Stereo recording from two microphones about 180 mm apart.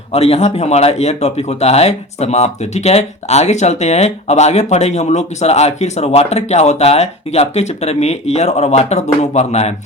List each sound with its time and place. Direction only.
0.1 s speech: 35° left (ahead or behind)